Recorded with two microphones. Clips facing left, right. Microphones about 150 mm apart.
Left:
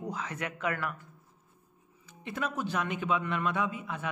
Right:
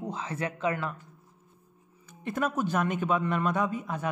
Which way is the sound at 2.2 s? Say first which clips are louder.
Right 5 dB; 45° right (ahead or behind).